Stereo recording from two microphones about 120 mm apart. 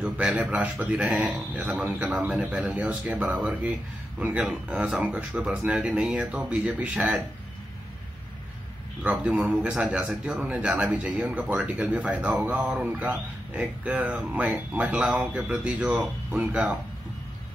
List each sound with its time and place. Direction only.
0.0 s a man's voice: 10° right (ahead or behind)
9.0 s a man's voice: 10° right (ahead or behind)